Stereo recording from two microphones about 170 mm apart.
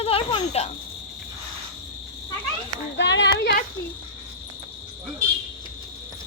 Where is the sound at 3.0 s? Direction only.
90° left.